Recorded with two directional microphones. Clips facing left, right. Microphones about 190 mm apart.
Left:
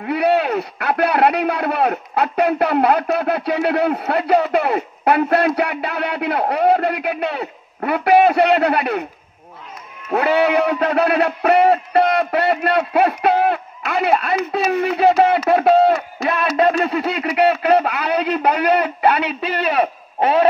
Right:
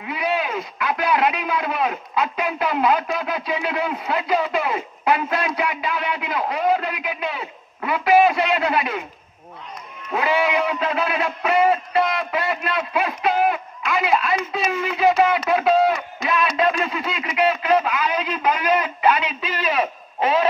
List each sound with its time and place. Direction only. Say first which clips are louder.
0.0 s speech: left 7 dB; 65° left (ahead or behind)
10.1 s speech: left 5 dB; 65° left (ahead or behind)